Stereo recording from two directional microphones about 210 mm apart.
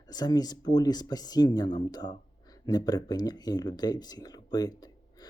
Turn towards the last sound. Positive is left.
turn(degrees=20)  # may be behind; listen again after turning